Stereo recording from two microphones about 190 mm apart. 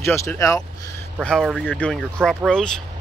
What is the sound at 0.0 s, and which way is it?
Speech, 10° left (ahead or behind).